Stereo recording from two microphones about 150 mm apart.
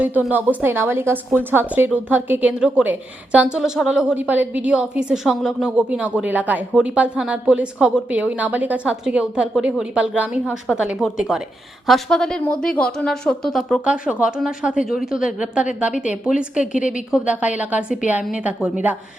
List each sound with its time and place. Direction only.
0.0 s a woman's voice: 10° right (ahead or behind)
16.7 s a woman's voice: 60° left (ahead or behind)
17.1 s a woman's voice: 5° right (ahead or behind)